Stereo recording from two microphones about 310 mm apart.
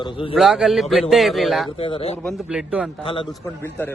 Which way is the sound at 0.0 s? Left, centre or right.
Centre.